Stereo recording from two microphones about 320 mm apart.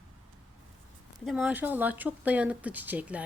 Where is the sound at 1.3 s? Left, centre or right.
Centre.